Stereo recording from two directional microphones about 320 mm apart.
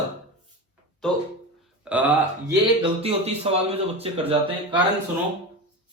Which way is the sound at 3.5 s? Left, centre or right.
Centre.